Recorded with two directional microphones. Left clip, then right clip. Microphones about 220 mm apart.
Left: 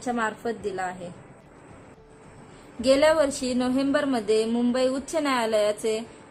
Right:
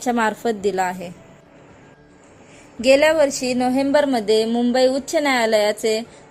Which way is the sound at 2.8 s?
15° right (ahead or behind).